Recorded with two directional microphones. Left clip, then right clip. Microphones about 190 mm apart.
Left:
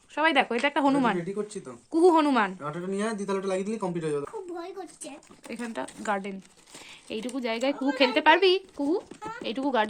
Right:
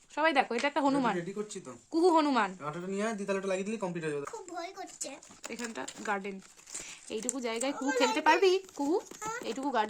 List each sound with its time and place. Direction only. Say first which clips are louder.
0.2 s speech: left 4 dB; centre (ahead or behind)
4.5 s a woman's voice: left 2 dB; 60° right (ahead or behind)
5.5 s speech: left 5 dB; centre (ahead or behind)